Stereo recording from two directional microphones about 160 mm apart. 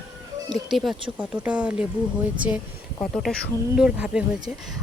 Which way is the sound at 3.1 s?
5° left (ahead or behind).